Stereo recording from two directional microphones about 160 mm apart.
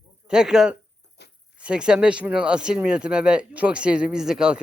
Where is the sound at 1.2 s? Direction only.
90° left.